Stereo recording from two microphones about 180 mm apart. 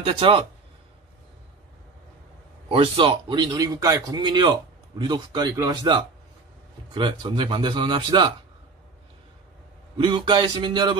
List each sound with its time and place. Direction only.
0.0 s a man's voice: 30° right (ahead or behind)
2.7 s a man's voice: 30° right (ahead or behind)
9.9 s a man's voice: 25° right (ahead or behind)